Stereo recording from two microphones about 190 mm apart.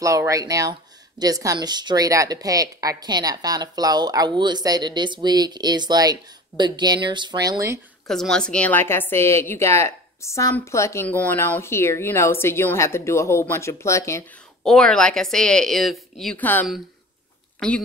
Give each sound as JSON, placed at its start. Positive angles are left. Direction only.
{"t": 0.0, "sound": "a woman's voice", "side_deg": -15}
{"t": 8.1, "sound": "a woman's voice", "side_deg": 5}
{"t": 14.6, "sound": "speech", "side_deg": 0}